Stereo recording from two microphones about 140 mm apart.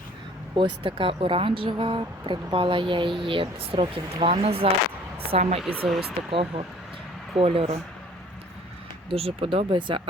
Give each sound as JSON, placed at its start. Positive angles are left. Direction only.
{"t": 0.5, "sound": "speech", "side_deg": -35}
{"t": 9.0, "sound": "speech", "side_deg": -45}